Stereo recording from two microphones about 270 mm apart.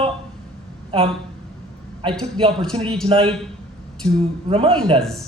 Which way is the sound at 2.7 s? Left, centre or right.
Centre.